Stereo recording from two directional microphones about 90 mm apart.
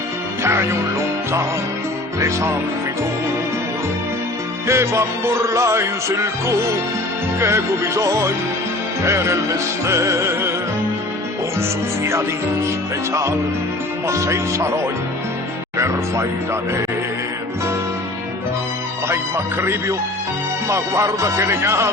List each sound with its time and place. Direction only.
0.4 s music: 30° right (ahead or behind)
2.2 s music: 35° right (ahead or behind)
4.6 s music: 30° right (ahead or behind)
14.1 s music: 35° right (ahead or behind)
20.7 s music: 35° right (ahead or behind)